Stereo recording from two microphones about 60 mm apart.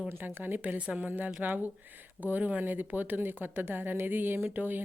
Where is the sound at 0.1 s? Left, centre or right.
Right.